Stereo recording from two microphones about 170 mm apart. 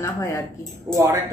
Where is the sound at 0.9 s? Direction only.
20° right (ahead or behind).